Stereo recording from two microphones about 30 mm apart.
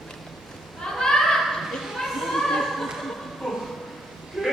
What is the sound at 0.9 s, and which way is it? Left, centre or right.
Children playing, centre.